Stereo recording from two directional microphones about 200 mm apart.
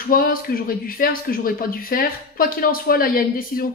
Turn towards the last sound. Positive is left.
turn(degrees=45)  # may be behind; listen again after turning